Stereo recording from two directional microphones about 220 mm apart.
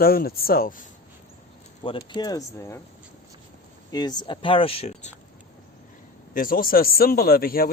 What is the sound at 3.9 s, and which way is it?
A man's voice, 20° left (ahead or behind).